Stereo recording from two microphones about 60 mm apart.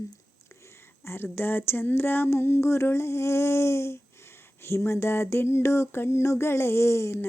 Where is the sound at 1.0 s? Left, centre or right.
Left.